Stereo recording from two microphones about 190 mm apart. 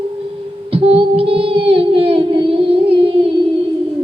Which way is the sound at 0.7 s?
30° right (ahead or behind).